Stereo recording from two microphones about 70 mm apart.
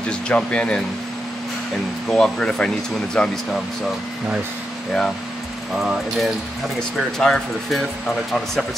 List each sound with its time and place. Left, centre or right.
0.1 s speech: centre
2.0 s speech: centre
7.2 s speech: centre